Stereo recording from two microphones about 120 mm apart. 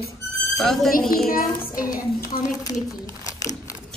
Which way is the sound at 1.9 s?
30° left (ahead or behind).